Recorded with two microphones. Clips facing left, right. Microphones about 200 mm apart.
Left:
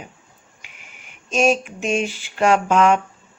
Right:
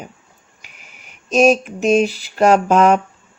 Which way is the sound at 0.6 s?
40° right (ahead or behind).